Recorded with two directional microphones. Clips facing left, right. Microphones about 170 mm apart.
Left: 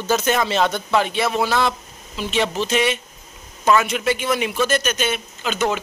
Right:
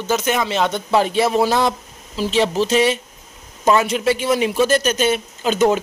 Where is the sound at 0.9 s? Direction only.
35° right (ahead or behind).